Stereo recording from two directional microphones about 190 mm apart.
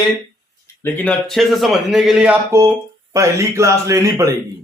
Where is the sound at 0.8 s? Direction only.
10° left (ahead or behind); by 4.3 s 15° right (ahead or behind).